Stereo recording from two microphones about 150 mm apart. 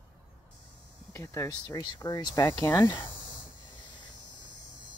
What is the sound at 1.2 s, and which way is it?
Speech, 20° left (ahead or behind).